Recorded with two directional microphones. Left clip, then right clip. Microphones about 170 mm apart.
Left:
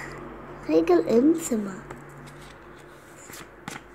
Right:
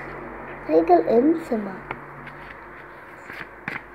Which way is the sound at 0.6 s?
45° left (ahead or behind).